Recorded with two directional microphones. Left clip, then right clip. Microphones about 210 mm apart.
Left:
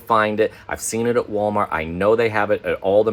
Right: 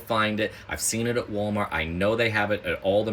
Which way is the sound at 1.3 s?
25° left (ahead or behind).